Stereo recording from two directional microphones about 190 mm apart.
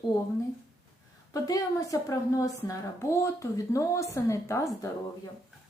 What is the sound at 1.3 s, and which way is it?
A woman's voice, 20° left (ahead or behind).